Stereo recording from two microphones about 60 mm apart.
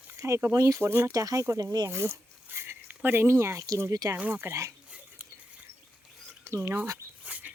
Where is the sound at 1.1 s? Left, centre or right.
Right.